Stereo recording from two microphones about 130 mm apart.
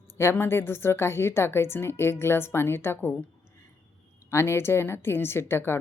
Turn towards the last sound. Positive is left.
turn(degrees=20)  # may be behind; listen again after turning